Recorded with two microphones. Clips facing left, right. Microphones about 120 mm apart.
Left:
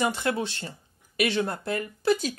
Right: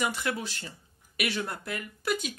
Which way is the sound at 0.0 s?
30° left (ahead or behind).